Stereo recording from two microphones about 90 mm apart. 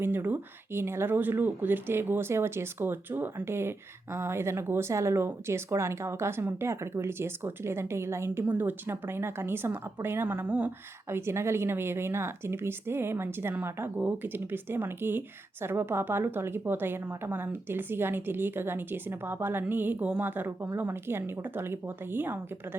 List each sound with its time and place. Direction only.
0.0 s speech: 25° right (ahead or behind)